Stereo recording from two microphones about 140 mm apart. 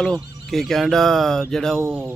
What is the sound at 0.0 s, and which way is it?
Speech, 5° left (ahead or behind).